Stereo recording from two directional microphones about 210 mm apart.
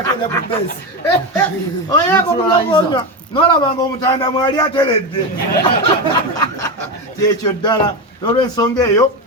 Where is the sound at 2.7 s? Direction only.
25° left (ahead or behind).